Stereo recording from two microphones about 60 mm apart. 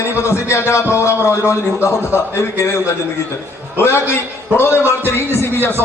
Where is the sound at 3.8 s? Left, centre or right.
Left.